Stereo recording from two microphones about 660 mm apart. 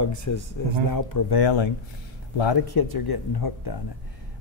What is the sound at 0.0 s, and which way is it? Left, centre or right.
A man's voice, left.